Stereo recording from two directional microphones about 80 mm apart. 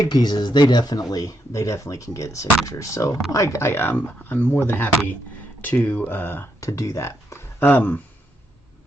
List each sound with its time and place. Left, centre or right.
0.1 s speech: left
6.6 s speech: left